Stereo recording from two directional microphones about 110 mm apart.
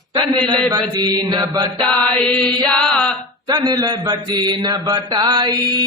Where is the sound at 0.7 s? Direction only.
35° right (ahead or behind).